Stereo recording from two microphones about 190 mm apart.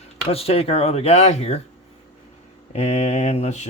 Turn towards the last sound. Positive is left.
turn(degrees=35)  # may be behind; listen again after turning